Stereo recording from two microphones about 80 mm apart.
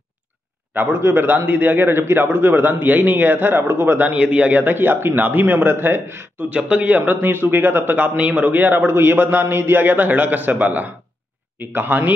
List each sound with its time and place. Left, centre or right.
0.7 s a man's voice: right
6.5 s a man's voice: centre